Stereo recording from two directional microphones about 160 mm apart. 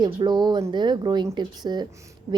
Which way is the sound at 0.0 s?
25° right (ahead or behind).